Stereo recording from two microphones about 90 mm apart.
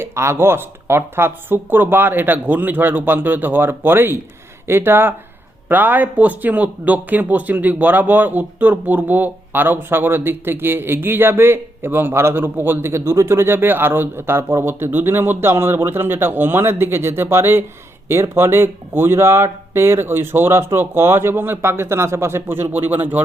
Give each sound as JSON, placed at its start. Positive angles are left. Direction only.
{"t": 0.0, "sound": "speech", "side_deg": -30}